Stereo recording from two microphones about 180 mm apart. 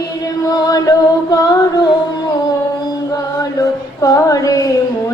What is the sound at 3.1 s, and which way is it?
Chant, 20° left (ahead or behind).